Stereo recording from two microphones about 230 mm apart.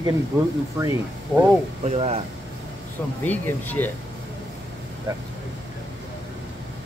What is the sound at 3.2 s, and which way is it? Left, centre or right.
Speech, centre.